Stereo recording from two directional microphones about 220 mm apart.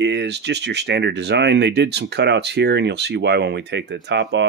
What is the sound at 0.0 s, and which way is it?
Speech, 50° right (ahead or behind).